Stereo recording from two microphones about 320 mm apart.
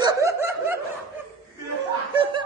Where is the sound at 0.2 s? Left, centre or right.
Centre.